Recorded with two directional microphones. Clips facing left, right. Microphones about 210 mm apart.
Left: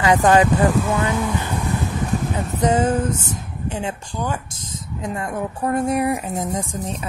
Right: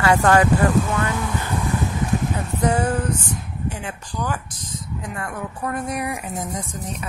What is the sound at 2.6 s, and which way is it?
Speech, 20° left (ahead or behind).